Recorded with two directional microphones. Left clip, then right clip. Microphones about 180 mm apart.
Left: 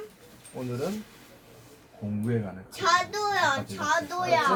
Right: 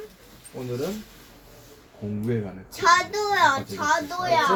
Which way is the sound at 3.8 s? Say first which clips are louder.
Right 3 dB; 10° left (ahead or behind).